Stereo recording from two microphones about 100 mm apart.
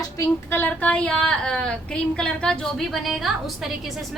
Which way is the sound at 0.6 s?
15° left (ahead or behind).